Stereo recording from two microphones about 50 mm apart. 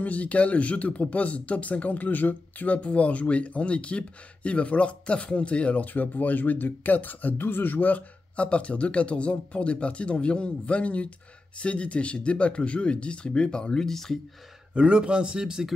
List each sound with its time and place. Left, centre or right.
0.0 s speech: left; by 14.2 s centre
14.7 s a man's voice: centre